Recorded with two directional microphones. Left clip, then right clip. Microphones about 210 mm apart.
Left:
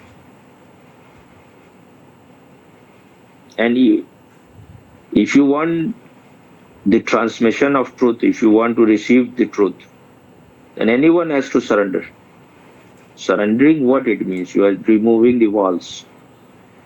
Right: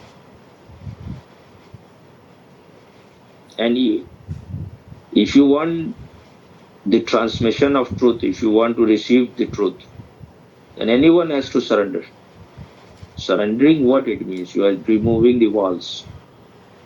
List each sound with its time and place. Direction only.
3.5 s speech: 50° left (ahead or behind)
5.2 s speech: 50° left (ahead or behind)
6.9 s speech: 50° left (ahead or behind)
10.8 s speech: 50° left (ahead or behind)
13.1 s speech: 50° left (ahead or behind)